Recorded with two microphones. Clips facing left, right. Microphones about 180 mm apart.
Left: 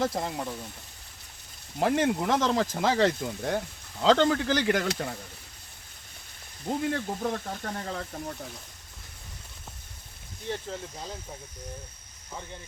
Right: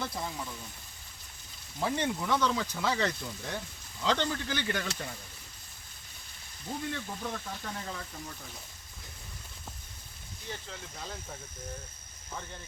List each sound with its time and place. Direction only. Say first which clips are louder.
0.0 s speech: left 8 dB; 50° left (ahead or behind)
1.8 s speech: left 7 dB; 70° left (ahead or behind)
2.9 s speech: left 7 dB; 50° left (ahead or behind)
6.7 s speech: left 8 dB; 60° left (ahead or behind)
11.0 s speech: left 3 dB; 15° left (ahead or behind)